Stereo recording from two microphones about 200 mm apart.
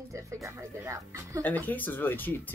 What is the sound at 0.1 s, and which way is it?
Speech, 15° right (ahead or behind).